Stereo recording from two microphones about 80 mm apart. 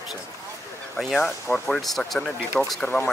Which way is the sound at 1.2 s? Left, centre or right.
Centre.